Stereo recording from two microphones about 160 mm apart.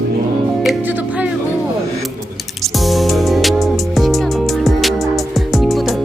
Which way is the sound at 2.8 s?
Centre (ahead or behind).